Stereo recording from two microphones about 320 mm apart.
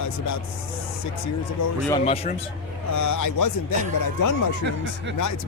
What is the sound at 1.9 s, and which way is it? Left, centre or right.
Speech, centre.